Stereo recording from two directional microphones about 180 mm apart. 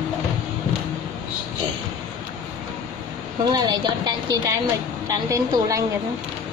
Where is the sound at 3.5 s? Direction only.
25° right (ahead or behind).